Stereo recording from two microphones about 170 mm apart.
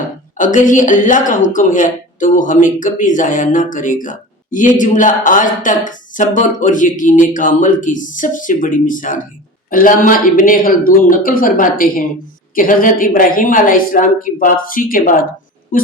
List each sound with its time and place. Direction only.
0.3 s a woman's voice: 50° left (ahead or behind)